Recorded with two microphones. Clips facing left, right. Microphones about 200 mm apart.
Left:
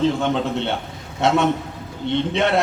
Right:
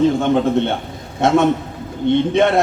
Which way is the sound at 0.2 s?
50° right (ahead or behind).